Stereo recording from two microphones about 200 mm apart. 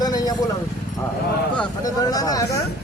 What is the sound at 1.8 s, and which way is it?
Speech, 20° left (ahead or behind).